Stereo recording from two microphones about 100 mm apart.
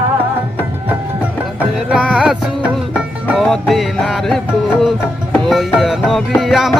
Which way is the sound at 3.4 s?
Centre (ahead or behind).